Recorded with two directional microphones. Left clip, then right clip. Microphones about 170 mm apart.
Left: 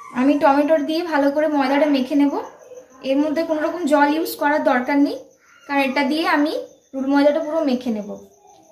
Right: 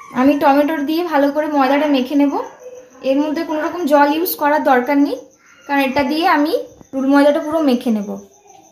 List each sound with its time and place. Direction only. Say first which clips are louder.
0.1 s a woman's voice: right 3 dB; 35° right (ahead or behind)